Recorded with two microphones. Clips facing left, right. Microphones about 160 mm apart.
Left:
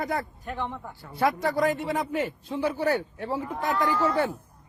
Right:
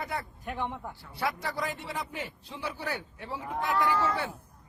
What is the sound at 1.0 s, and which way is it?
A man's voice, 50° left (ahead or behind).